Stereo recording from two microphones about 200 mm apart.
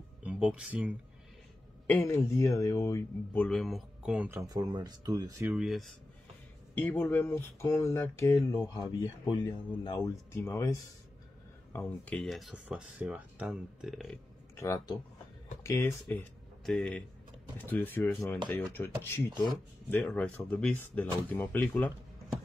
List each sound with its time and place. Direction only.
0.2 s speech: 5° right (ahead or behind)
1.9 s speech: 10° left (ahead or behind)
3.4 s speech: centre (ahead or behind)
4.5 s speech: 20° right (ahead or behind)
5.5 s speech: centre (ahead or behind)
6.9 s speech: 10° left (ahead or behind)
14.6 s speech: 15° left (ahead or behind)